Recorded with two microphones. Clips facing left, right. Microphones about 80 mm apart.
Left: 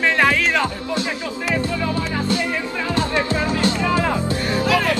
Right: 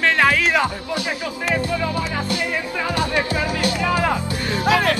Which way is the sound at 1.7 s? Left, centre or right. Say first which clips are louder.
Even; right.